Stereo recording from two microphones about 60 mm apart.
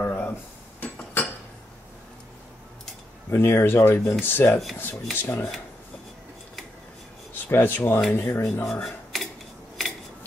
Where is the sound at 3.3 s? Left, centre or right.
Left.